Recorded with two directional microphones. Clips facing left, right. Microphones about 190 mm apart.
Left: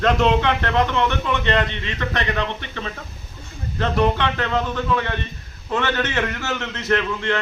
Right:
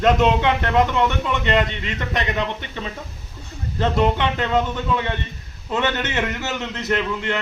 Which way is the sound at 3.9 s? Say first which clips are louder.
Left 1 dB; 20° right (ahead or behind).